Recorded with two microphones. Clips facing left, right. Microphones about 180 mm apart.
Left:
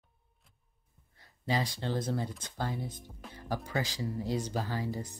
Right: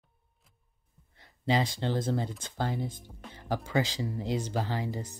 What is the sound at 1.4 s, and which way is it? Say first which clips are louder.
Speech: right 4 dB; 25° right (ahead or behind).